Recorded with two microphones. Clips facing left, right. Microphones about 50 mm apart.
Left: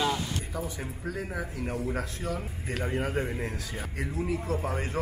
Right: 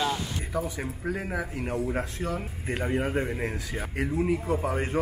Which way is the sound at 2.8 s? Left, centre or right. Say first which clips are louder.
Right 2 dB; centre.